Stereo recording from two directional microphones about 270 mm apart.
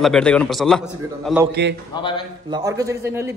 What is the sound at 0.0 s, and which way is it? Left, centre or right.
A man's voice, centre.